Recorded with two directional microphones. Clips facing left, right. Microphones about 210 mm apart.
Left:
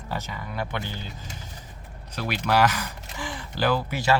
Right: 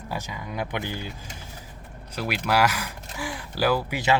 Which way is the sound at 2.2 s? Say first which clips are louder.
Left 1 dB; 10° right (ahead or behind).